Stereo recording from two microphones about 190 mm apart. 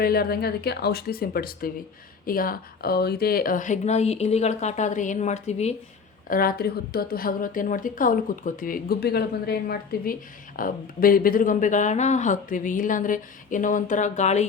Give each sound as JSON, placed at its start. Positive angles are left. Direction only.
{"t": 0.0, "sound": "a woman's voice", "side_deg": 55}
{"t": 6.2, "sound": "a woman's voice", "side_deg": 50}